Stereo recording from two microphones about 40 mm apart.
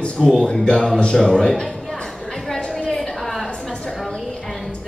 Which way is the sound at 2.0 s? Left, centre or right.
Centre.